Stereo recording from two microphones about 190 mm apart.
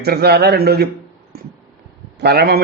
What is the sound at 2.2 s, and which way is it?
Speech, 55° right (ahead or behind).